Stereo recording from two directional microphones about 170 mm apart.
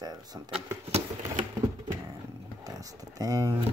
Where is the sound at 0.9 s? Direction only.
35° right (ahead or behind).